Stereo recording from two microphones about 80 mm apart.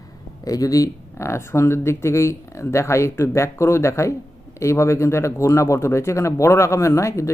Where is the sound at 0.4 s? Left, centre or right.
Left.